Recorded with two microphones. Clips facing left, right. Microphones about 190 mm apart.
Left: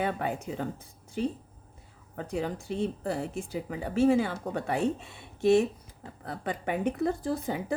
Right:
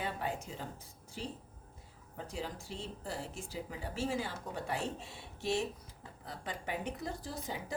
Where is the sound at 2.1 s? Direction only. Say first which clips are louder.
Left 9 dB; 60° left (ahead or behind).